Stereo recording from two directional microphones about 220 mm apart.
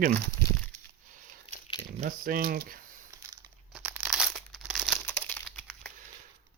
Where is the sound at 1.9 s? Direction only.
40° right (ahead or behind).